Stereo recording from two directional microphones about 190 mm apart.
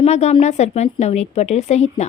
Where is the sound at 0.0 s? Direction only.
35° left (ahead or behind).